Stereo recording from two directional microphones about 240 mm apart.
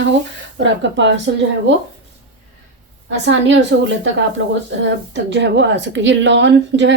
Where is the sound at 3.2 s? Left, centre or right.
Right.